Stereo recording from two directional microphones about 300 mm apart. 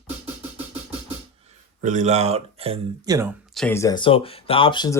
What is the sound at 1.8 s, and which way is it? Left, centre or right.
Speech, right.